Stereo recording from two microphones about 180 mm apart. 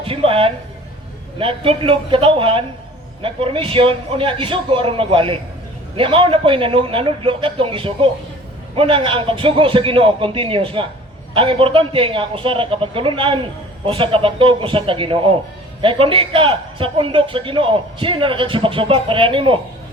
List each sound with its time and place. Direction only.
0.0 s a woman's voice: 30° right (ahead or behind)